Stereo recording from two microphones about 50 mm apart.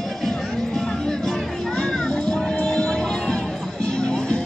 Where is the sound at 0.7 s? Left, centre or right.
Centre.